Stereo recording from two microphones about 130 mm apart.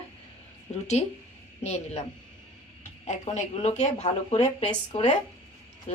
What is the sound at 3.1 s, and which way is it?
Speech, 60° left (ahead or behind).